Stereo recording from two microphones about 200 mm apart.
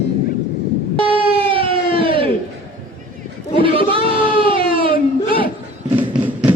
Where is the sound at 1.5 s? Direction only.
25° right (ahead or behind).